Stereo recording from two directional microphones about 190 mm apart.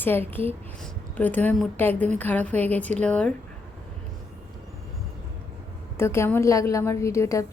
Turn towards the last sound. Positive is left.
turn(degrees=15)  # may be behind; listen again after turning